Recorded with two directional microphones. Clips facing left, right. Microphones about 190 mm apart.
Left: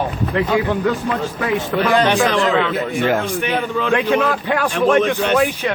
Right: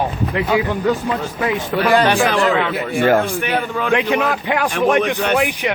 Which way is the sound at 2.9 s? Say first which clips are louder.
Right 5 dB; 45° right (ahead or behind).